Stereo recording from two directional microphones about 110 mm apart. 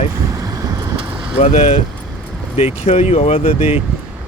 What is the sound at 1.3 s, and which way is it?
Speech, 70° left (ahead or behind).